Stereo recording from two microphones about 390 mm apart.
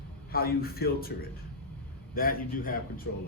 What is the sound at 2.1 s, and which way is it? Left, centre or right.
Speech, left.